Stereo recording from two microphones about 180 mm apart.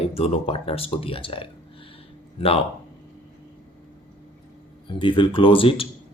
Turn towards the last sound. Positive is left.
turn(degrees=30)  # may be behind; listen again after turning